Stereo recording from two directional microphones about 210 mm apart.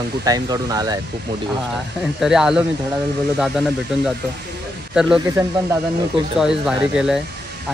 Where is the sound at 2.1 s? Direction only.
Centre (ahead or behind).